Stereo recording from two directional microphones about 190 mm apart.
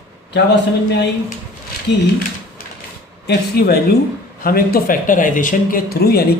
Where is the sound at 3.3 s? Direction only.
55° left (ahead or behind).